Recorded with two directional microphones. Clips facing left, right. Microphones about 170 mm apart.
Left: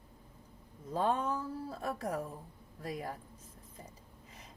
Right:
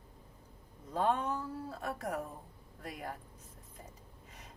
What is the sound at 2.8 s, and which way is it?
Speech, 35° left (ahead or behind).